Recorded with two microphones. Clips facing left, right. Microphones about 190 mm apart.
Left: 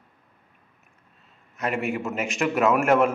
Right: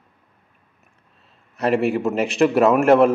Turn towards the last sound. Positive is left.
turn(degrees=-35)  # may be behind; listen again after turning